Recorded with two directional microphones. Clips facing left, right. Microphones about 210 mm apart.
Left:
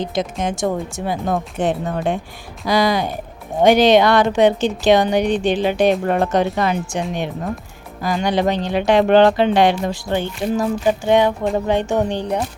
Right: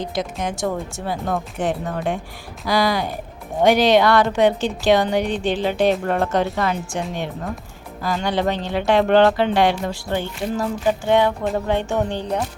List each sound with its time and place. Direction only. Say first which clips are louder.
0.0 s speech: left 3 dB; 20° left (ahead or behind)